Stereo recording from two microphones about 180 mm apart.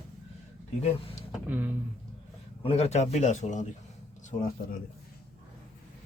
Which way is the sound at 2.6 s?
35° left (ahead or behind).